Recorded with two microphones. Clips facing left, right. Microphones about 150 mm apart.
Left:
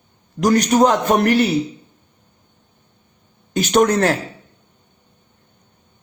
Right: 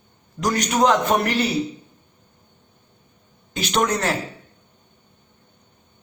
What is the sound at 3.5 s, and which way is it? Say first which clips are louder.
Speech: left 7 dB; 45° left (ahead or behind).